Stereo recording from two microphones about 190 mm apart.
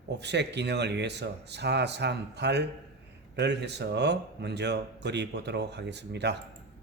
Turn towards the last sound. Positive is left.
turn(degrees=-65)  # may be behind; listen again after turning